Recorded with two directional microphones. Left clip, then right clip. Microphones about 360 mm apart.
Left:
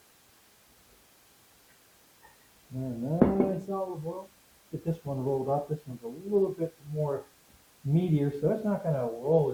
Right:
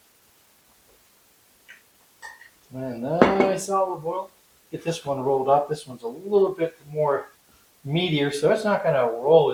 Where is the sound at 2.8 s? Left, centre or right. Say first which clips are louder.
Right 8 dB; centre.